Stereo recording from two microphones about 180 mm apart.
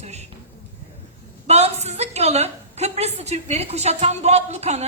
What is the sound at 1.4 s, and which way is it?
A woman's voice, 35° right (ahead or behind).